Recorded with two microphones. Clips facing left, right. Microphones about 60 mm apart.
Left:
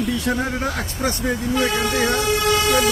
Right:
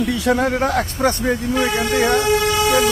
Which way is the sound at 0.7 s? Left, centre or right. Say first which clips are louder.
Right 6 dB; right.